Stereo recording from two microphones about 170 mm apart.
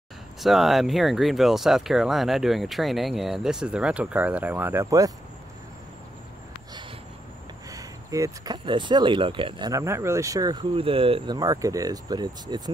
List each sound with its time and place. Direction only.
0.4 s speech: centre (ahead or behind); by 5.1 s 20° right (ahead or behind)
7.7 s speech: 20° right (ahead or behind)